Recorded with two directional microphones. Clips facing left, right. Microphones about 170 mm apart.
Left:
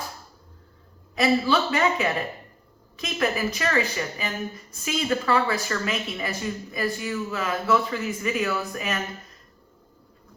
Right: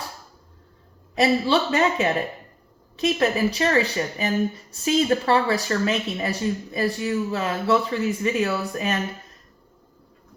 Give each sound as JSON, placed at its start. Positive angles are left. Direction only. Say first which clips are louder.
{"t": 1.2, "sound": "speech", "louder": "right 2 dB", "side_deg": -30}